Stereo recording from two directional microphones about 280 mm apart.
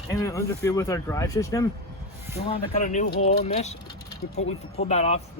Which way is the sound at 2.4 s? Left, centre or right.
Left.